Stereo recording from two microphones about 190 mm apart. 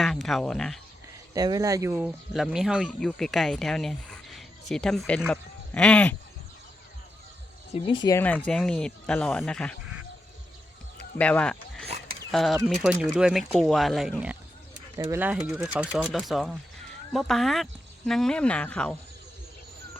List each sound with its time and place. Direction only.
0.0 s speech: centre (ahead or behind)
1.3 s speech: 20° right (ahead or behind); by 6.1 s 5° left (ahead or behind)
7.7 s speech: 25° left (ahead or behind)
8.2 s speech: 5° left (ahead or behind)
11.2 s speech: 5° left (ahead or behind)